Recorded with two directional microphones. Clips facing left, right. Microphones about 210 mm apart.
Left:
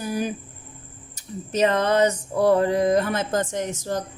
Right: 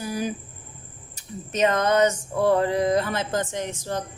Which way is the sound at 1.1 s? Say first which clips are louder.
Left 4 dB; 30° left (ahead or behind).